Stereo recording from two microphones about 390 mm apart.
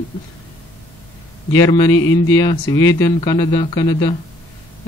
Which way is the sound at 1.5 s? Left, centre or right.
Centre.